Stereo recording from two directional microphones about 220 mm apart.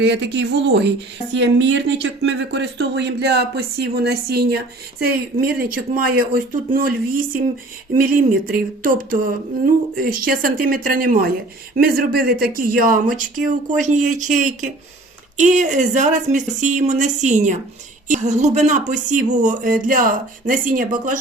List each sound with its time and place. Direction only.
0.0 s speech: 55° right (ahead or behind); by 21.2 s 35° right (ahead or behind)